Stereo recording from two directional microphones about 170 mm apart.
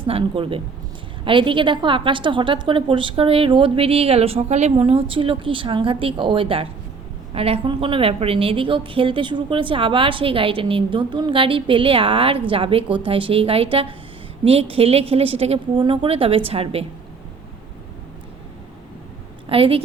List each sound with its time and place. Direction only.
0.0 s a woman's voice: 30° right (ahead or behind)
19.5 s a woman's voice: 35° right (ahead or behind)